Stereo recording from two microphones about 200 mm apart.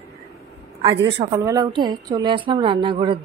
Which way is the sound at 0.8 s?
25° right (ahead or behind).